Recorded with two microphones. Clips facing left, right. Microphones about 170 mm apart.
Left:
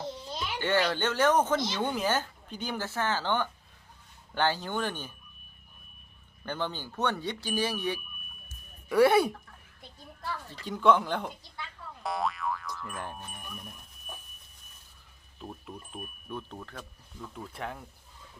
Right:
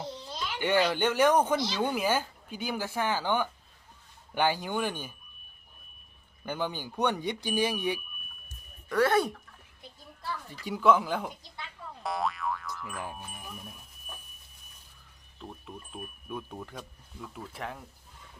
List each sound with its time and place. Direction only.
0.6 s speech: 15° right (ahead or behind)
6.4 s speech: 10° right (ahead or behind)
8.9 s speech: 10° left (ahead or behind)
10.5 s speech: 10° right (ahead or behind)
15.4 s speech: 5° left (ahead or behind)